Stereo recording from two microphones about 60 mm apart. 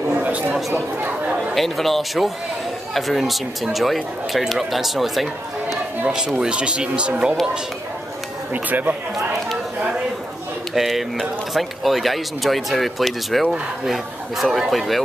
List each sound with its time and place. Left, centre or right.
0.1 s chatter: right
0.6 s speech: centre
6.0 s speech: centre
8.6 s speech: right
10.7 s speech: centre